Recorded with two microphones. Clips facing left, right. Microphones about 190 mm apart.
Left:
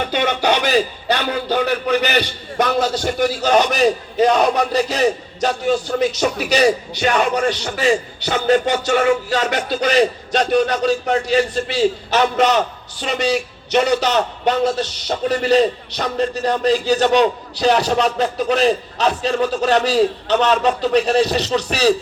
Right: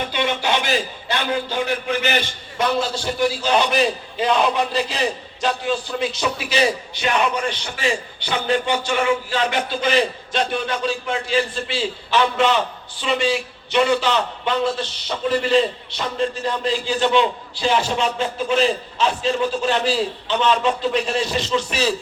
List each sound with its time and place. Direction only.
0.0 s a man's voice: 50° left (ahead or behind)